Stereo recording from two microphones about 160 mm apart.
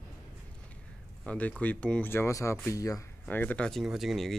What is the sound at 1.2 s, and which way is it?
Speech, 5° left (ahead or behind).